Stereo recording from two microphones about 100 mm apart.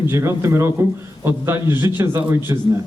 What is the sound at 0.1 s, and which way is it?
A man's voice, 30° right (ahead or behind).